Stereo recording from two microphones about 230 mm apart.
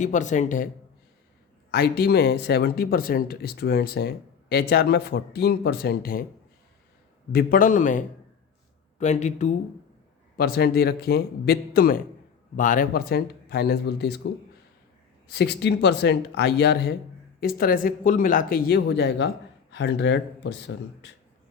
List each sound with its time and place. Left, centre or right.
0.0 s speech: left
1.7 s speech: left
7.3 s speech: left
10.3 s speech: left
15.3 s speech: left